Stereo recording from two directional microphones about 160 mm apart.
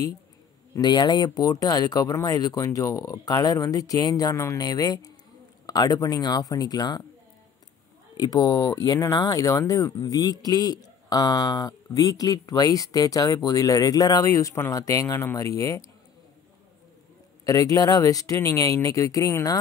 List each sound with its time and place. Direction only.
0.7 s speech: 25° left (ahead or behind)
8.2 s speech: 25° left (ahead or behind)
17.5 s speech: 20° left (ahead or behind)